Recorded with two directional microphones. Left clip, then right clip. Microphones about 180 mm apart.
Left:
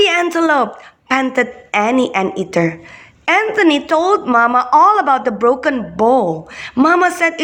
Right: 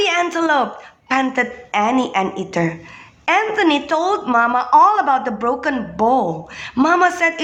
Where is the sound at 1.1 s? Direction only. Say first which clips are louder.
Left 3 dB; 25° left (ahead or behind).